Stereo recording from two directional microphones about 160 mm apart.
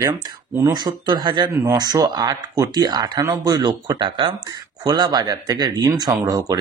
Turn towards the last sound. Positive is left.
turn(degrees=-25)  # may be behind; listen again after turning